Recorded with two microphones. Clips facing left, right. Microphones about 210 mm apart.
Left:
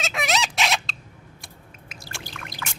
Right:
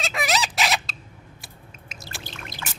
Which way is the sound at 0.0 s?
Centre (ahead or behind).